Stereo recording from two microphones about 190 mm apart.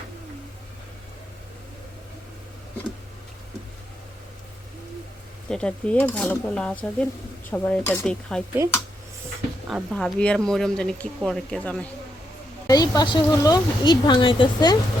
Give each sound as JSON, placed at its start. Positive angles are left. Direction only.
{"t": 5.5, "sound": "speech", "side_deg": 5}
{"t": 9.6, "sound": "speech", "side_deg": 0}
{"t": 12.6, "sound": "speech", "side_deg": 20}